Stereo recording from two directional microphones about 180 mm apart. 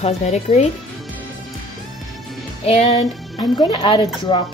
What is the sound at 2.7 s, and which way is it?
A woman's voice, 35° left (ahead or behind).